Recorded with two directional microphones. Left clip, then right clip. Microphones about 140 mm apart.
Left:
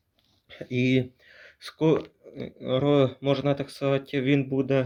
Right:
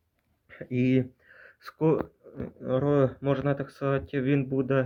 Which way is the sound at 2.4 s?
25° left (ahead or behind).